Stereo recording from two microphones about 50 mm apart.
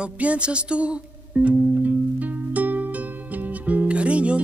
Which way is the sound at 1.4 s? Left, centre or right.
Right.